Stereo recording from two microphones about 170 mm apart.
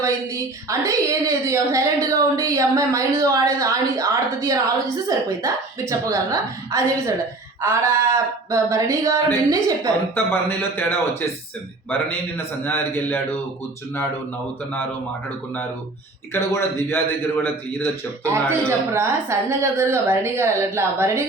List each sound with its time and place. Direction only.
0.0 s a woman's voice: 20° right (ahead or behind)
10.2 s a man's voice: 10° left (ahead or behind)
12.6 s a man's voice: 10° left (ahead or behind)
16.3 s a man's voice: 15° left (ahead or behind)
18.9 s a woman's voice: 15° right (ahead or behind)